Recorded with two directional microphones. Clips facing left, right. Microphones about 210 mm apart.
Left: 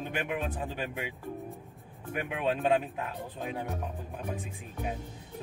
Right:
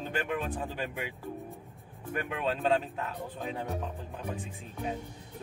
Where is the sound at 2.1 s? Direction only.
15° left (ahead or behind).